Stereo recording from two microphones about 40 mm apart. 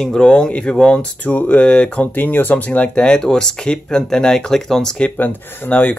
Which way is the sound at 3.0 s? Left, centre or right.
Left.